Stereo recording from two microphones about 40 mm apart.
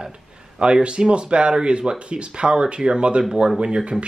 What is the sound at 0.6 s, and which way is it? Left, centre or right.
A man's voice, right.